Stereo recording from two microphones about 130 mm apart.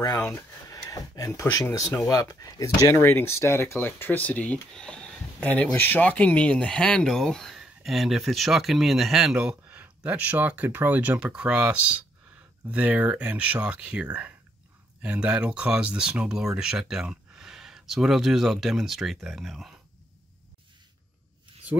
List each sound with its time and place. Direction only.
0.3 s speech: 25° left (ahead or behind); by 19.7 s centre (ahead or behind)